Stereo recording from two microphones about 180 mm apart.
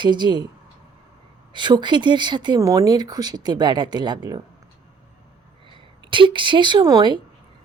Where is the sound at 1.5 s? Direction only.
25° right (ahead or behind).